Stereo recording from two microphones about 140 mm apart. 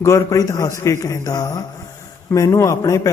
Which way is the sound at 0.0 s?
20° left (ahead or behind).